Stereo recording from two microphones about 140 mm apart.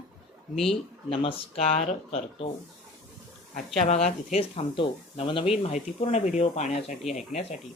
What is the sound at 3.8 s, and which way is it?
Speech, 55° left (ahead or behind).